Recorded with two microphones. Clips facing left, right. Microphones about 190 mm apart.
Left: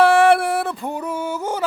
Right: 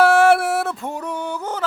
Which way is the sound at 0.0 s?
Centre (ahead or behind).